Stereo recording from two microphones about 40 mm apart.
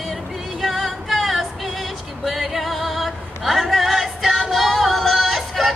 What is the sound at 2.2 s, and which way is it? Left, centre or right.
Female singing, centre.